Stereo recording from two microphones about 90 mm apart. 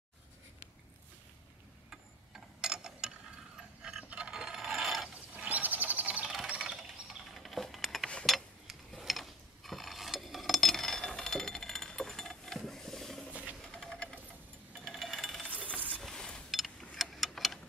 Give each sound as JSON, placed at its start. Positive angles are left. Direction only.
{"t": 1.9, "sound": "tick-tock", "side_deg": -5}
{"t": 3.8, "sound": "mechanisms", "side_deg": -10}
{"t": 5.3, "sound": "mechanisms", "side_deg": -15}
{"t": 6.3, "sound": "a sound", "side_deg": -10}
{"t": 8.3, "sound": "mechanisms", "side_deg": 0}
{"t": 13.3, "sound": "sewing machine", "side_deg": -15}
{"t": 13.6, "sound": "sewing machine", "side_deg": 10}
{"t": 14.7, "sound": "a sound", "side_deg": 0}
{"t": 16.9, "sound": "clock", "side_deg": 0}